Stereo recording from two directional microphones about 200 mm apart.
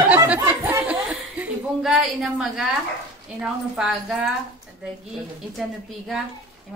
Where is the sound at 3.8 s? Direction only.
5° right (ahead or behind).